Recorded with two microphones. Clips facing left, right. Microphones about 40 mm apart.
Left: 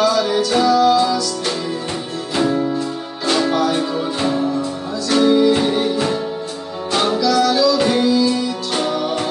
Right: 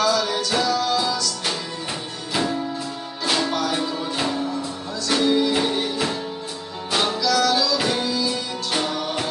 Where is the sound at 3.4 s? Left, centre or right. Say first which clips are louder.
Left 6 dB; centre.